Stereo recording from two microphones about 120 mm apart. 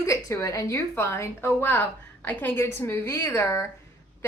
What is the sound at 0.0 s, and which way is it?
Speech, 25° left (ahead or behind).